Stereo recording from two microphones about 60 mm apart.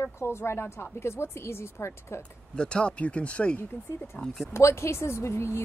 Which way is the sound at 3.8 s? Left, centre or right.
Left.